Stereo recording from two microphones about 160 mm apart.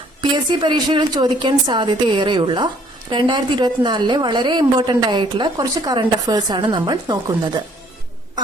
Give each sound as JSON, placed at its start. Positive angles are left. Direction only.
{"t": 0.2, "sound": "a woman's voice", "side_deg": -30}